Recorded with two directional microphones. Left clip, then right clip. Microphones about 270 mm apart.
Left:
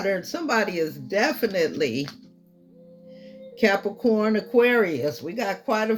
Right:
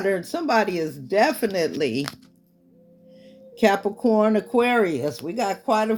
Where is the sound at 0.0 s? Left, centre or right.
Right.